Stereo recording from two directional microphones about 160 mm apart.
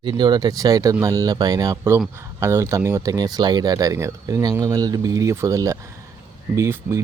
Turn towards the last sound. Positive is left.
turn(degrees=-20)  # may be behind; listen again after turning